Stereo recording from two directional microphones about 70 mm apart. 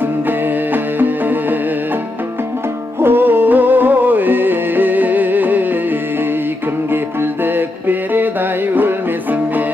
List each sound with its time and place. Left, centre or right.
0.9 s music: right
3.0 s music: right
7.4 s music: right